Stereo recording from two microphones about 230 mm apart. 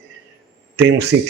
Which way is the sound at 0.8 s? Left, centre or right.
Right.